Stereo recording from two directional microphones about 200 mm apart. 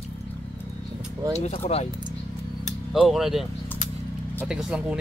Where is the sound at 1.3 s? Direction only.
35° left (ahead or behind).